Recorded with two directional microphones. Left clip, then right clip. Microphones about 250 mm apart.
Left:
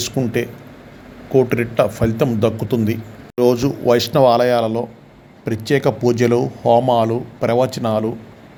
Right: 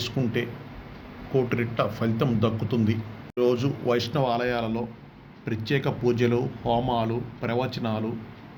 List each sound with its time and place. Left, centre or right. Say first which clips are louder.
0.0 s a man's voice: left 8 dB; left